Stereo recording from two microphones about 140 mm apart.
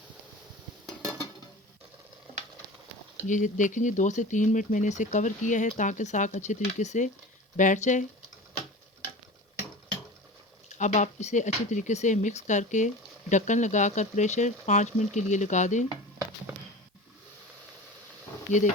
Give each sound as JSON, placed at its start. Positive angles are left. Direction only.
{"t": 3.2, "sound": "speech", "side_deg": 65}
{"t": 10.8, "sound": "speech", "side_deg": 60}
{"t": 18.5, "sound": "speech", "side_deg": 60}